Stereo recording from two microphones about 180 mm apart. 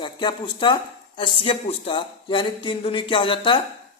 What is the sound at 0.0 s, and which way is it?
A woman's voice, 25° left (ahead or behind).